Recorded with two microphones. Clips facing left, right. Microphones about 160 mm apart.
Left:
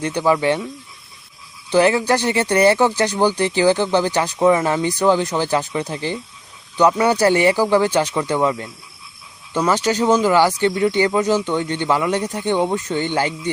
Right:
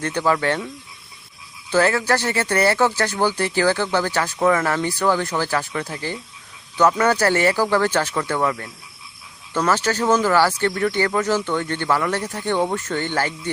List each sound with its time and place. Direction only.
0.0 s speech: 15° left (ahead or behind)
1.7 s speech: 15° left (ahead or behind)